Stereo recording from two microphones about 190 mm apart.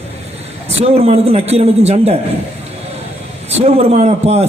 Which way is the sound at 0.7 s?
35° right (ahead or behind).